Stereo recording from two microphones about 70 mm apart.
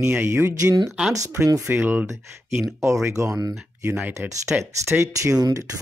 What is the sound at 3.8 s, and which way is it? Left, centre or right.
Speech, right.